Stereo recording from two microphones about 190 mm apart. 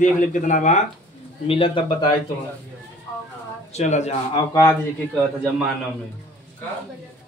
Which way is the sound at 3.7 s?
35° left (ahead or behind).